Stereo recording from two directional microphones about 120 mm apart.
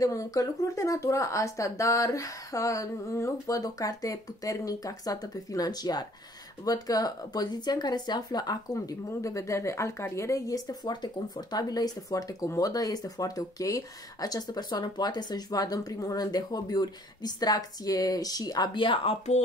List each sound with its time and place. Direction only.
0.0 s speech: 30° left (ahead or behind); by 19.1 s 45° left (ahead or behind)